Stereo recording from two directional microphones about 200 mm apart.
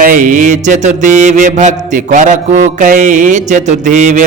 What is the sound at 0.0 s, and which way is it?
Speech, 40° right (ahead or behind).